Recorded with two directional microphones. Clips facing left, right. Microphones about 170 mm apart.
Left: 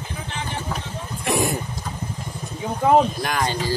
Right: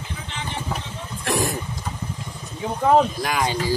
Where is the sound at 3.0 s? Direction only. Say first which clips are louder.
Even; 5° right (ahead or behind).